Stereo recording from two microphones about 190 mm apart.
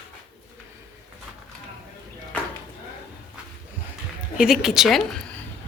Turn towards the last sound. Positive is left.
turn(degrees=0)  # may be behind; listen again after turning